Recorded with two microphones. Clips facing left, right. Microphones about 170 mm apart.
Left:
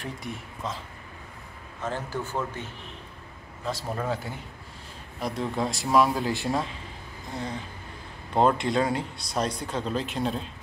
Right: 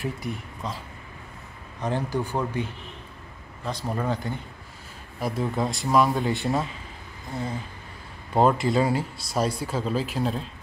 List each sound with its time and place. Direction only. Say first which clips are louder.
0.0 s speech: right 5 dB; centre (ahead or behind)
1.8 s speech: right 5 dB; 15° right (ahead or behind)
3.6 s speech: right 2 dB; centre (ahead or behind)
8.4 s speech: right 2 dB; 5° right (ahead or behind)